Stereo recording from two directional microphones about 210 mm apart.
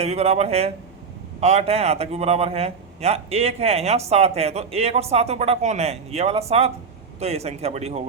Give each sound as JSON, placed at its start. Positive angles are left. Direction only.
{"t": 0.0, "sound": "a man's voice", "side_deg": -30}